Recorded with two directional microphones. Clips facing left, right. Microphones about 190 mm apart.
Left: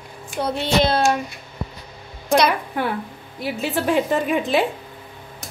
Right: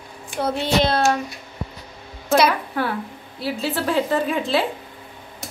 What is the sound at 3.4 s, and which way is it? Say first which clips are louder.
A woman's voice: left 1 dB; 15° left (ahead or behind).